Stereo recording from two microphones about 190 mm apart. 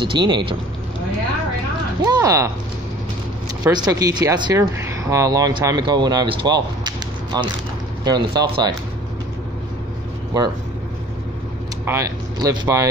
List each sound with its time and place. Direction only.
0.0 s speech: 25° right (ahead or behind)
2.0 s speech: 20° right (ahead or behind)
3.6 s speech: 20° right (ahead or behind)
11.8 s speech: 15° right (ahead or behind)